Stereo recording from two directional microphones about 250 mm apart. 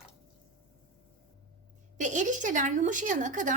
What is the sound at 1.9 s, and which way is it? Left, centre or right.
A woman's voice, right.